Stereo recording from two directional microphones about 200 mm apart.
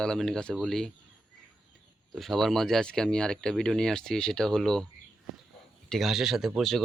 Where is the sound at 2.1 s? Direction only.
Centre (ahead or behind).